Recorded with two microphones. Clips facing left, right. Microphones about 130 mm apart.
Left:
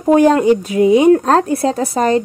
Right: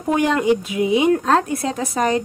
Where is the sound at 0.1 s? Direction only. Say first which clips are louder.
Left 7 dB; 40° left (ahead or behind).